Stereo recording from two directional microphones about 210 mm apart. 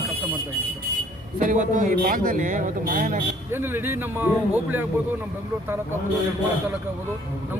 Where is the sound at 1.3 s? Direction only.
35° right (ahead or behind).